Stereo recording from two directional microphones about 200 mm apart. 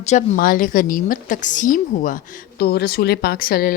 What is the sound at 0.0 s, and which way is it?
A woman's voice, 35° left (ahead or behind).